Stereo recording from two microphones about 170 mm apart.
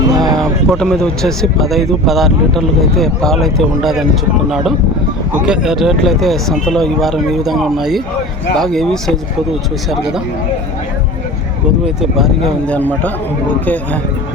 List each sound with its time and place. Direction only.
0.1 s a sound: 25° right (ahead or behind)
0.3 s speech: centre (ahead or behind)
12.1 s speech: centre (ahead or behind)
12.7 s a man's voice: 10° left (ahead or behind)